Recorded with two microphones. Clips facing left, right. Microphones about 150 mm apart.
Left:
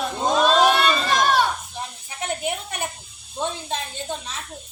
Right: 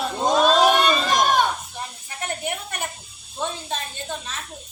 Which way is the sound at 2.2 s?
15° left (ahead or behind).